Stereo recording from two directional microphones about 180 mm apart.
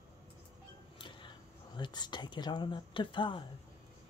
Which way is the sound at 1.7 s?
25° left (ahead or behind).